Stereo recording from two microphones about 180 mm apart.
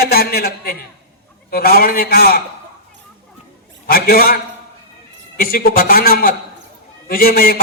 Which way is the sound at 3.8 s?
55° left (ahead or behind).